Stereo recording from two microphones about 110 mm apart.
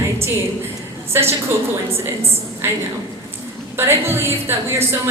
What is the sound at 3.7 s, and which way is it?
A woman's voice, 25° right (ahead or behind).